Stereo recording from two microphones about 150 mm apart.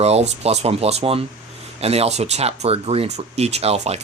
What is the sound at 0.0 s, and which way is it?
Speech, 45° right (ahead or behind).